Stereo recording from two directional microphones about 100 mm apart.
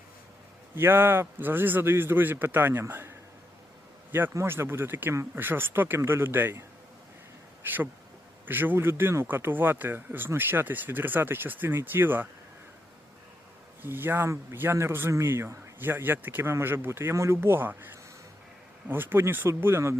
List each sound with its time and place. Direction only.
0.8 s speech: 20° right (ahead or behind)
13.8 s speech: 20° right (ahead or behind)